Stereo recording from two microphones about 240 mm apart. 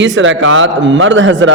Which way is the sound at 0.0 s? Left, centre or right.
Right.